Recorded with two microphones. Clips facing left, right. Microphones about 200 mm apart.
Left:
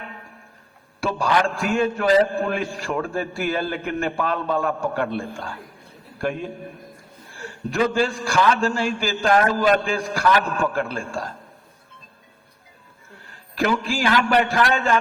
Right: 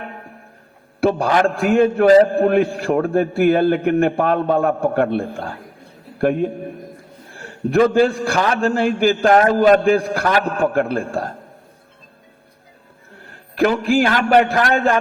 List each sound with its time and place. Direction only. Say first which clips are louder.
0.0 s music: right 5 dB; 50° right (ahead or behind)
1.0 s a man's voice: right 6 dB; 55° right (ahead or behind)
13.2 s a man's voice: right 6 dB; 55° right (ahead or behind)